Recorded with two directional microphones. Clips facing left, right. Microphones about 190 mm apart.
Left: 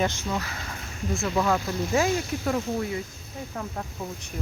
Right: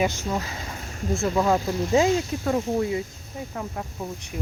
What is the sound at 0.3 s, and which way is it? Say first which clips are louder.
Speech: right 2 dB; 20° right (ahead or behind).